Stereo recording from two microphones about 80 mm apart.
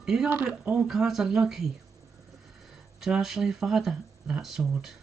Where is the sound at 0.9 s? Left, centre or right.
Centre.